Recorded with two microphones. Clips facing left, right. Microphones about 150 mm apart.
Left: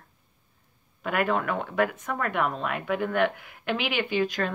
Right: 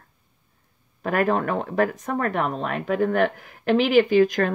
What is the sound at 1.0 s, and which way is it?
Speech, 40° right (ahead or behind).